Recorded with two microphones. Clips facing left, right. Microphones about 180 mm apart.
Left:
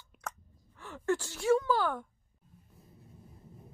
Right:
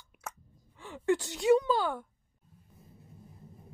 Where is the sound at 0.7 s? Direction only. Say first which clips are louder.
Right 3 dB; 15° right (ahead or behind).